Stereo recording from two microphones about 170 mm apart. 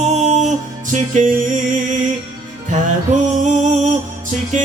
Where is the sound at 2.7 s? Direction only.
45° right (ahead or behind).